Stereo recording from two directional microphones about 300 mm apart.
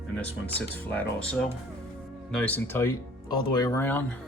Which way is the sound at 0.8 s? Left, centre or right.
Centre.